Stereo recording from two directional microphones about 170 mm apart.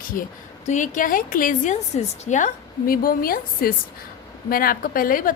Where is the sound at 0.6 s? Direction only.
45° left (ahead or behind).